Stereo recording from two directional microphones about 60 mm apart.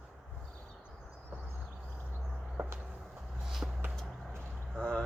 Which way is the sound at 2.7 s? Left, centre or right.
Centre.